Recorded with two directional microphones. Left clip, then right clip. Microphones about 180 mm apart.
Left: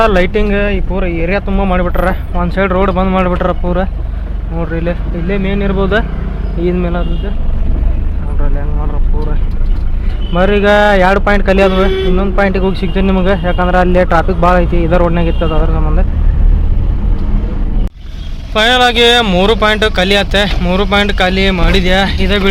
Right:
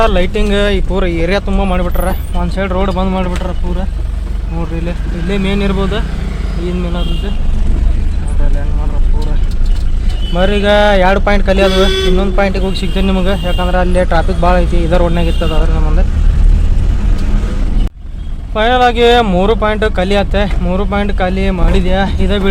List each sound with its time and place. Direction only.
0.0 s speech: 5° right (ahead or behind)
0.4 s speech: 25° right (ahead or behind); by 3.3 s 5° right (ahead or behind)
5.3 s speech: 20° right (ahead or behind)
5.8 s speech: centre (ahead or behind)
10.3 s speech: 10° right (ahead or behind)
18.5 s speech: 5° right (ahead or behind)